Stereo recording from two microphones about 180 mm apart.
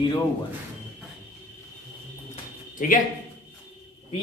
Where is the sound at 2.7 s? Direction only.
50° left (ahead or behind).